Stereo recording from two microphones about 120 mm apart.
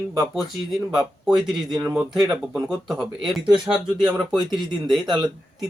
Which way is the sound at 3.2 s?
Centre (ahead or behind).